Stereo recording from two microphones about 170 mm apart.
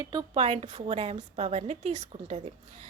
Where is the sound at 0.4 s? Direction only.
40° right (ahead or behind).